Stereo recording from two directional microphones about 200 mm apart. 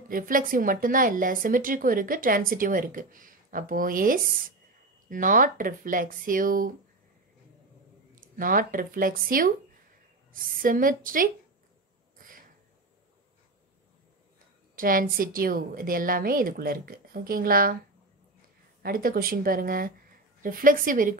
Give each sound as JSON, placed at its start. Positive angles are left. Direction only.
{"t": 0.1, "sound": "a woman's voice", "side_deg": -45}
{"t": 8.2, "sound": "a woman's voice", "side_deg": -45}
{"t": 14.8, "sound": "a woman's voice", "side_deg": -45}
{"t": 18.8, "sound": "a woman's voice", "side_deg": -45}